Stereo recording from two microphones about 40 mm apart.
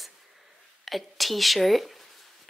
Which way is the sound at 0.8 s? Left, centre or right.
Centre.